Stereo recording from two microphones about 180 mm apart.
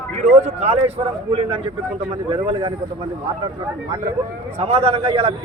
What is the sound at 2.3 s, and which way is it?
Speech, 30° right (ahead or behind).